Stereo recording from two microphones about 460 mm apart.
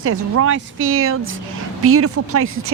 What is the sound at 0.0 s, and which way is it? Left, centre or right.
A woman's voice, right.